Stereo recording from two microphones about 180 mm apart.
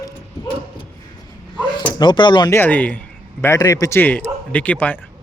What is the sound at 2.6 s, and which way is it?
Speech, 10° left (ahead or behind).